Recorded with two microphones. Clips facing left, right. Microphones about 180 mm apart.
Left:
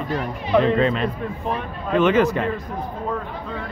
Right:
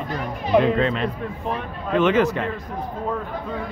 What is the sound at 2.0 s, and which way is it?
Speech, 45° left (ahead or behind).